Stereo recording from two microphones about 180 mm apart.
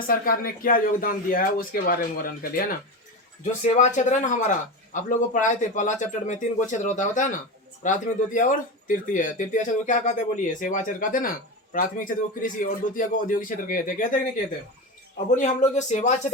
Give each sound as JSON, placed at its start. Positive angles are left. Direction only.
{"t": 0.1, "sound": "speech", "side_deg": 55}
{"t": 3.6, "sound": "speech", "side_deg": 40}
{"t": 15.4, "sound": "speech", "side_deg": 40}